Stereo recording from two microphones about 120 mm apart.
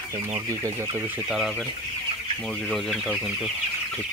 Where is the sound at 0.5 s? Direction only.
25° right (ahead or behind).